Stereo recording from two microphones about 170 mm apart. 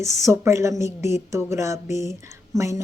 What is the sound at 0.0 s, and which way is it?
Speech, 15° right (ahead or behind).